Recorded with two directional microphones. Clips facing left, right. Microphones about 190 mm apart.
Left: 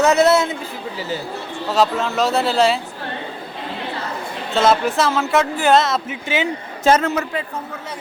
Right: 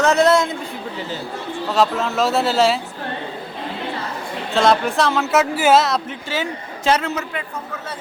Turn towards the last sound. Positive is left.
turn(degrees=50)  # may be behind; listen again after turning